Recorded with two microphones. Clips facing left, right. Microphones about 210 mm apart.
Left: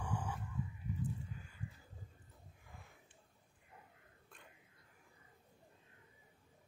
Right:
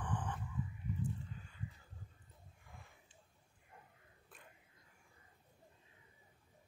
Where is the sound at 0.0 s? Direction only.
10° left (ahead or behind).